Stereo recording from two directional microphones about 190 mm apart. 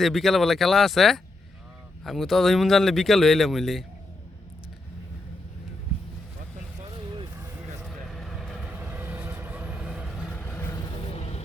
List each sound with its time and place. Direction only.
0.0 s speech: centre (ahead or behind)
7.3 s vehicle: 10° right (ahead or behind); by 10.9 s 15° left (ahead or behind)
11.2 s vehicle: 35° left (ahead or behind)